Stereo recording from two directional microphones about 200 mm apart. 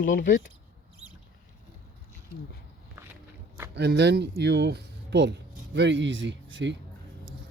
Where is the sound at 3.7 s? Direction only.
55° right (ahead or behind).